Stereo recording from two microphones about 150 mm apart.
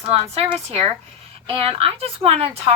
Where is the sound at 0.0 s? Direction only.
45° right (ahead or behind).